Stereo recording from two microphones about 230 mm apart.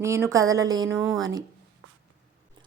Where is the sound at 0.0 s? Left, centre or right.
Centre.